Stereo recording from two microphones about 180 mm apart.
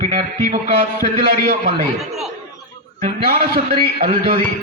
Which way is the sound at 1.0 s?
55° right (ahead or behind).